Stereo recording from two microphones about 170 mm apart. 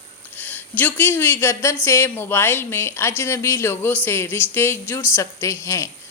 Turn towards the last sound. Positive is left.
turn(degrees=15)  # may be behind; listen again after turning